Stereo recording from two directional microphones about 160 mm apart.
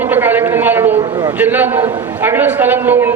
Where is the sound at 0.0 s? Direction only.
10° right (ahead or behind).